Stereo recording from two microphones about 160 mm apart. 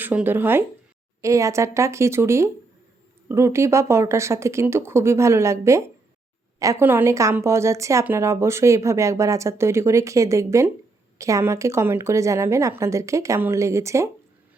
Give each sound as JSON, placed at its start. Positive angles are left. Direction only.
{"t": 0.0, "sound": "speech", "side_deg": -10}